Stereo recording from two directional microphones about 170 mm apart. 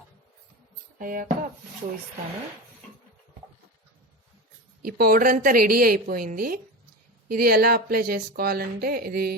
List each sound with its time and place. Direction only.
0.9 s speech: 55° right (ahead or behind)
4.8 s speech: 55° right (ahead or behind)